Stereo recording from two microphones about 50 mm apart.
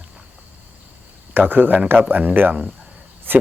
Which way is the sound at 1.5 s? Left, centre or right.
Right.